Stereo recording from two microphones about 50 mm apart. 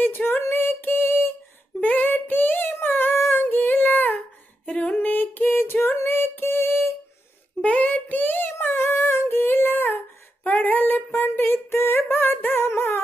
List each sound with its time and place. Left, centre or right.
0.0 s female singing: left
1.8 s female singing: left
4.6 s a sound: left
4.9 s singing: left
7.6 s female singing: left
10.4 s a sound: left
12.6 s music: left